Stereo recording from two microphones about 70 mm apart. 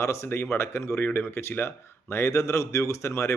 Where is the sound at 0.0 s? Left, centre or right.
Left.